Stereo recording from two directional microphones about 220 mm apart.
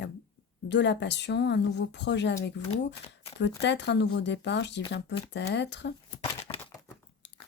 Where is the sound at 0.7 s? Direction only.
55° left (ahead or behind).